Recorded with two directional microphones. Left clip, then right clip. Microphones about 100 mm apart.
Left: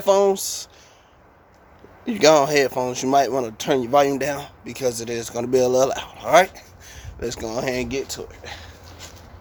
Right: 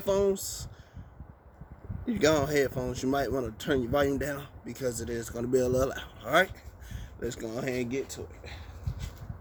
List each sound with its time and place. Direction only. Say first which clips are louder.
0.0 s speech: left 10 dB; 45° right (ahead or behind)
2.0 s speech: left 11 dB; 30° right (ahead or behind)